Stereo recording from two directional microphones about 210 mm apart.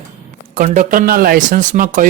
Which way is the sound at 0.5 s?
40° right (ahead or behind).